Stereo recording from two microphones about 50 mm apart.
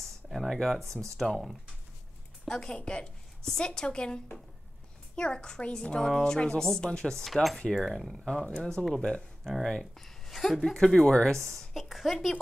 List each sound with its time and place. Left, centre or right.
0.3 s a sound: centre
0.6 s a woman's voice: centre
2.4 s a woman's voice: centre
7.2 s a woman's voice: centre
8.5 s a woman's voice: centre
11.5 s a woman's voice: centre